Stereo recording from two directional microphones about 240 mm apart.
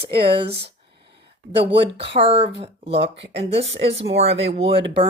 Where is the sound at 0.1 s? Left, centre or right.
Right.